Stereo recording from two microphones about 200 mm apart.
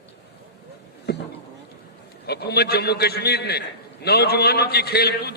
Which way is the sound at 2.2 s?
55° left (ahead or behind).